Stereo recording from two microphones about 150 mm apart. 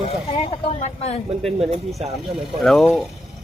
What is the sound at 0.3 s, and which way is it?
Speech, 35° left (ahead or behind).